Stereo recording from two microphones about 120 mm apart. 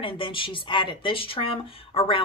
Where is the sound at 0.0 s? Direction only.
45° left (ahead or behind).